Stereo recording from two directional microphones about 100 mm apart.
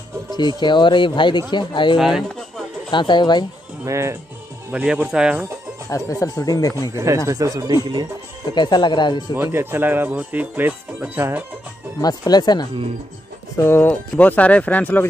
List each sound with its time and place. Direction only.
0.3 s speech: 50° left (ahead or behind)
2.0 s speech: 5° right (ahead or behind)
2.9 s speech: 50° left (ahead or behind)
3.8 s speech: 30° right (ahead or behind)
4.7 s speech: 10° right (ahead or behind)
5.9 s speech: 35° left (ahead or behind)
6.9 s speech: 30° right (ahead or behind)
8.5 s speech: 50° left (ahead or behind)
9.3 s speech: 25° right (ahead or behind)
12.0 s speech: 40° left (ahead or behind)
13.6 s speech: 20° left (ahead or behind)